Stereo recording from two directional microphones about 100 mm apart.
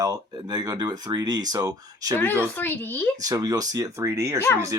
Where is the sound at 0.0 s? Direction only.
40° right (ahead or behind).